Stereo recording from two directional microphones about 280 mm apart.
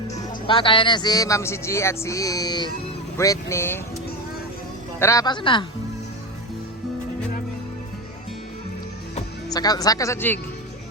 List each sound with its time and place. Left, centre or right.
0.1 s speech: centre
4.9 s speech: centre
9.1 s speech: centre